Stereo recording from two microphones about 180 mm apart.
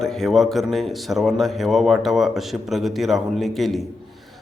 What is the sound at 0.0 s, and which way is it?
A man's voice, centre (ahead or behind).